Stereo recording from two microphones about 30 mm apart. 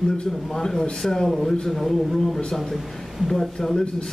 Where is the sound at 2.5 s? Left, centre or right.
Centre.